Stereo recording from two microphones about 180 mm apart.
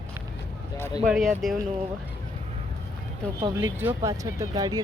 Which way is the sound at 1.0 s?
Centre (ahead or behind).